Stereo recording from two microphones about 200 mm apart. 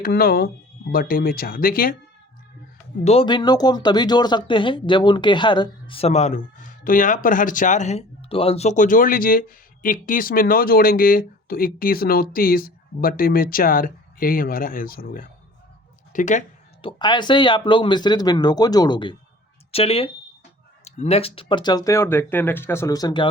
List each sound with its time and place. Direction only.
0.0 s speech: 50° left (ahead or behind)
3.0 s speech: 30° left (ahead or behind)
16.8 s speech: 20° left (ahead or behind)